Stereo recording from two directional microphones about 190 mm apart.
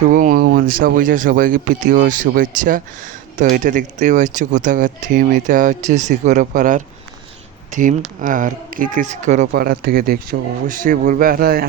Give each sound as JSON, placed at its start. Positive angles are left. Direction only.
{"t": 0.1, "sound": "speech", "side_deg": -45}
{"t": 9.5, "sound": "speech", "side_deg": -55}